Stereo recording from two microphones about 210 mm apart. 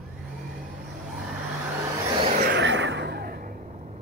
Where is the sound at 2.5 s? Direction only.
60° right (ahead or behind); by 3.5 s 45° right (ahead or behind).